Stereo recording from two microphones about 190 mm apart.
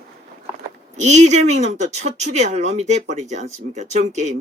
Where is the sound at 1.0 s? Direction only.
35° right (ahead or behind).